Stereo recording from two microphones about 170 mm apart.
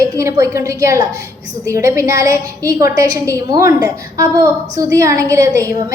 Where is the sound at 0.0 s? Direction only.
15° right (ahead or behind).